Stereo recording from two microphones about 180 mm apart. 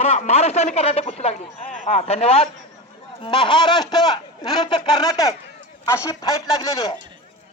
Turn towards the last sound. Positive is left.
turn(degrees=20)  # may be behind; listen again after turning